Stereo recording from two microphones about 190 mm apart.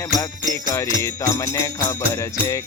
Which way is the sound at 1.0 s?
15° left (ahead or behind).